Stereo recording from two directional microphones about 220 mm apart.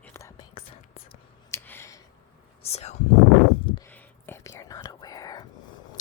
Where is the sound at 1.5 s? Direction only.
10° left (ahead or behind).